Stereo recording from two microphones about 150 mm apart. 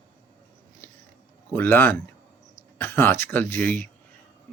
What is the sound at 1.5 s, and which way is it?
Speech, 15° left (ahead or behind).